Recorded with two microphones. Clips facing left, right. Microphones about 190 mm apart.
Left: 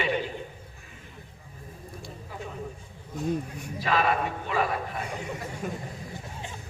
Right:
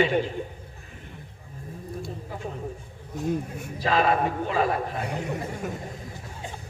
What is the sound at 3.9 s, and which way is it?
Speech, 30° right (ahead or behind).